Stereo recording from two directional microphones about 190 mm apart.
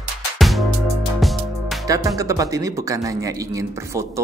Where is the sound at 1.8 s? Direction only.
20° right (ahead or behind).